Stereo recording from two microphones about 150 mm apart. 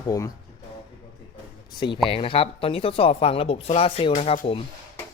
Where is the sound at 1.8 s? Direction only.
35° left (ahead or behind).